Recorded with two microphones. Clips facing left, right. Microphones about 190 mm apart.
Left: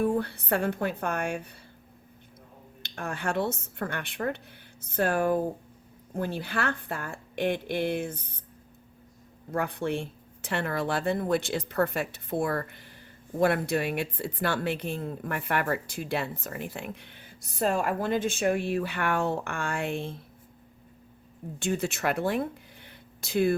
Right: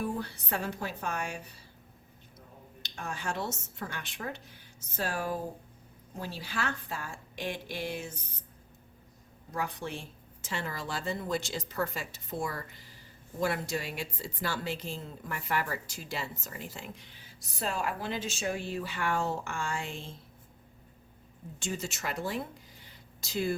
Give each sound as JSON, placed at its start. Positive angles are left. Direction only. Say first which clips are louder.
{"t": 0.0, "sound": "speech", "louder": "left 8 dB", "side_deg": 55}
{"t": 2.8, "sound": "speech", "louder": "left 5 dB", "side_deg": 60}
{"t": 9.5, "sound": "speech", "louder": "left 7 dB", "side_deg": 55}
{"t": 21.6, "sound": "speech", "louder": "left 8 dB", "side_deg": 60}